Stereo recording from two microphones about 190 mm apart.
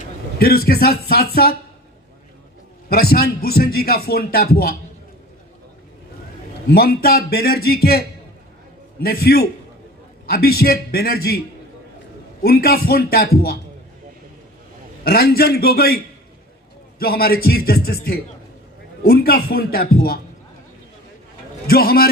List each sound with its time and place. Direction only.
0.3 s speech: 55° left (ahead or behind)
2.9 s speech: 55° left (ahead or behind)
6.7 s a man's voice: 55° left (ahead or behind)
12.4 s speech: 55° left (ahead or behind)
15.0 s speech: 55° left (ahead or behind)
17.0 s speech: 50° left (ahead or behind)
21.7 s speech: 50° left (ahead or behind)